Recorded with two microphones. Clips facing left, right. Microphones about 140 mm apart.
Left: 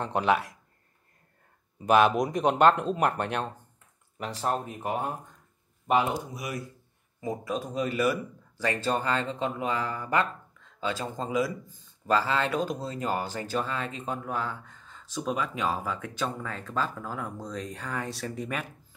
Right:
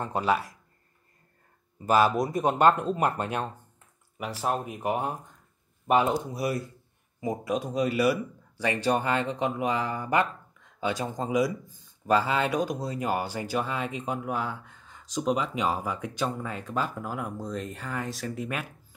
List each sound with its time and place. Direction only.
0.0 s speech: 5° right (ahead or behind)
1.9 s speech: 5° right (ahead or behind)
4.2 s speech: 10° right (ahead or behind)
6.3 s speech: 35° right (ahead or behind)
7.2 s speech: 15° right (ahead or behind)